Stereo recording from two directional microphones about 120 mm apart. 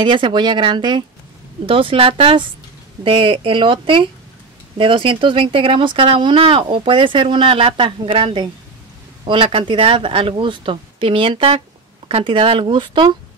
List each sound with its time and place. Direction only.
0.0 s speech: 45° right (ahead or behind)